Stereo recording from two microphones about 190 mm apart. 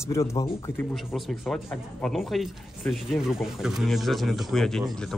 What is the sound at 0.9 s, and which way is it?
Speech, centre (ahead or behind).